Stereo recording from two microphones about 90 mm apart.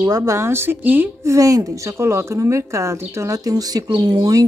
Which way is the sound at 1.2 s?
35° right (ahead or behind).